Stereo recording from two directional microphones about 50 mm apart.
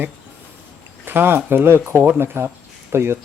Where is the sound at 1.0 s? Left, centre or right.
Right.